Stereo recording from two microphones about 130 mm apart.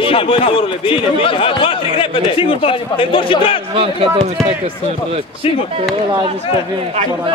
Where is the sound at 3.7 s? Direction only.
50° right (ahead or behind).